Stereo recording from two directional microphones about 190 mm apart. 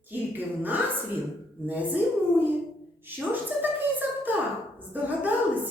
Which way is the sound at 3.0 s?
10° right (ahead or behind).